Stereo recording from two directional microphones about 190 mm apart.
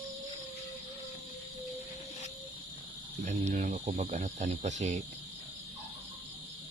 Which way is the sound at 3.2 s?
40° right (ahead or behind).